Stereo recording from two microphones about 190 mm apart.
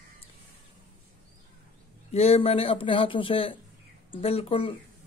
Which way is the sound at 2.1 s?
30° left (ahead or behind).